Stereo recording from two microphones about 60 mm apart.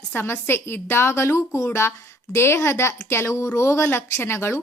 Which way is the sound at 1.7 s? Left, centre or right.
Left.